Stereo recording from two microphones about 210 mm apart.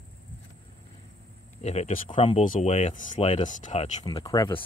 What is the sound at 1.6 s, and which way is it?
Speech, 30° left (ahead or behind).